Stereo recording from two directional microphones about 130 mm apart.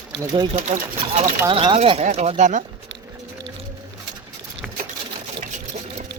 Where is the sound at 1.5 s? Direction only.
40° right (ahead or behind).